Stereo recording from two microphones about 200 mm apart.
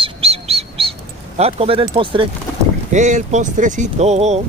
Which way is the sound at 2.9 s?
35° right (ahead or behind).